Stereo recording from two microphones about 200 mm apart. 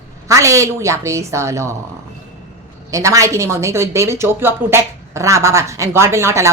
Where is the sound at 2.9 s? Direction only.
15° right (ahead or behind).